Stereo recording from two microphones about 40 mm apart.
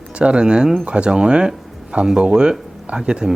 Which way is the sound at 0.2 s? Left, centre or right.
Right.